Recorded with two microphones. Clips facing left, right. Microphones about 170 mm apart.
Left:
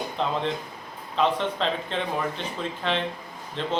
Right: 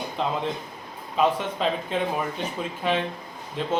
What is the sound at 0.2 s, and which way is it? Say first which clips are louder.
Speech: even; 5° right (ahead or behind).